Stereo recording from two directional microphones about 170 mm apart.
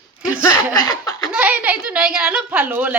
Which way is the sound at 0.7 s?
20° left (ahead or behind).